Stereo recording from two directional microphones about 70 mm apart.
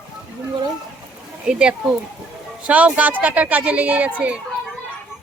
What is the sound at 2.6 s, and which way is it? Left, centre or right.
Speech, centre.